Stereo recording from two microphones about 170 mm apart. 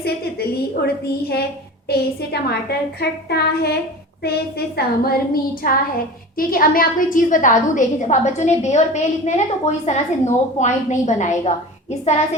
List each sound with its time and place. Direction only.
0.0 s a woman's voice: 70° left (ahead or behind); by 11.5 s 45° left (ahead or behind)
12.0 s child singing: 40° left (ahead or behind)